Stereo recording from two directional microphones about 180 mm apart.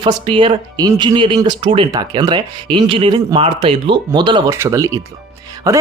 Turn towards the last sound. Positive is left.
turn(degrees=-20)  # may be behind; listen again after turning